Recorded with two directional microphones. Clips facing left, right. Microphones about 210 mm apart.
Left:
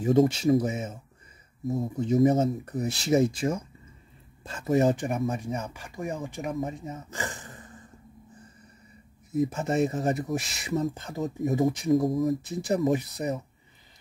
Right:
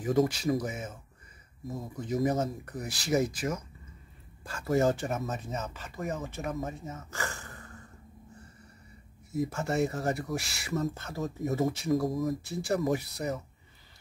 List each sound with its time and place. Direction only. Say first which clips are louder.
0.0 s speech: left 5 dB; 25° left (ahead or behind)
9.3 s speech: left 4 dB; 20° left (ahead or behind)